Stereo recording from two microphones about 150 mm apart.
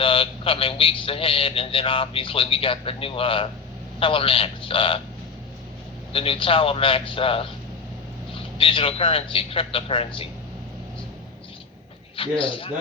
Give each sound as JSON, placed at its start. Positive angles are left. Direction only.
{"t": 0.0, "sound": "a man's voice", "side_deg": 35}
{"t": 6.1, "sound": "a man's voice", "side_deg": 40}
{"t": 12.1, "sound": "a man's voice", "side_deg": 35}